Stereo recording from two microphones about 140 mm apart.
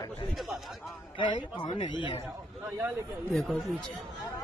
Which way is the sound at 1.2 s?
35° left (ahead or behind).